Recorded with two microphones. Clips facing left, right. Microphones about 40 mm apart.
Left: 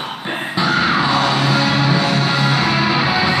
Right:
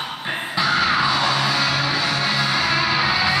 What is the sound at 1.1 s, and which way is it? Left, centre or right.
Music, left.